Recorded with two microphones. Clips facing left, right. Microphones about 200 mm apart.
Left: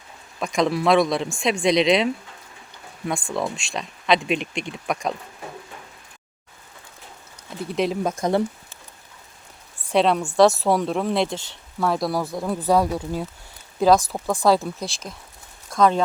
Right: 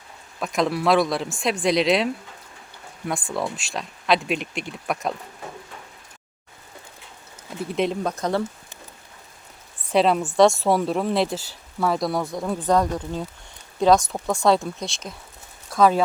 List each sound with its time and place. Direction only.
0.3 s speech: centre (ahead or behind)
3.5 s speech: 5° right (ahead or behind)
7.7 s speech: centre (ahead or behind)
8.2 s speech: 15° left (ahead or behind)
9.9 s speech: centre (ahead or behind)